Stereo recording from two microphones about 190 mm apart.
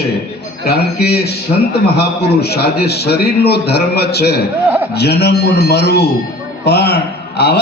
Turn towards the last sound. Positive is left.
turn(degrees=60)  # may be behind; listen again after turning